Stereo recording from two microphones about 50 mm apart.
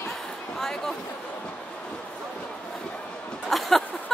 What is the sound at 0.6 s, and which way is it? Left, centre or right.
Speech, centre.